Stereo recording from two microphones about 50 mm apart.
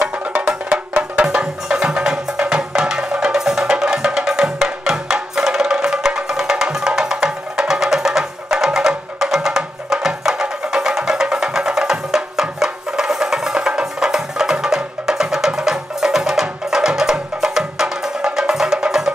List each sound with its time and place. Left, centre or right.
0.0 s music: right
1.2 s music: centre